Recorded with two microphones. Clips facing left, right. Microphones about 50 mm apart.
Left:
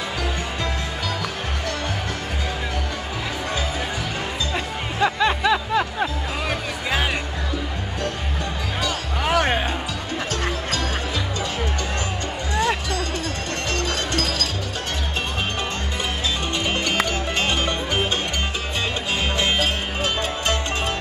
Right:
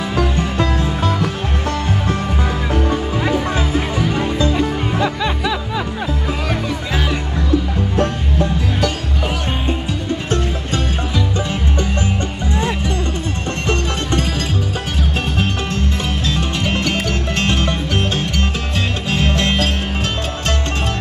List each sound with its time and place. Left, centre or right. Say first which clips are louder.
2.7 s music: right 9 dB; right
5.0 s music: left 4 dB; centre
9.3 s music: left 9 dB; left
12.5 s music: right 1 dB; right
16.3 s music: right 4 dB; centre